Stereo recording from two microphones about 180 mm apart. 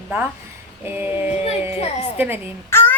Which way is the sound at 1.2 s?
35° left (ahead or behind).